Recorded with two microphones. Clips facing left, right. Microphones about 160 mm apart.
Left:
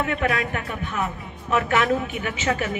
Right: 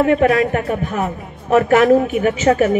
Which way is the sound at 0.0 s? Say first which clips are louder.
Right 11 dB; 35° right (ahead or behind).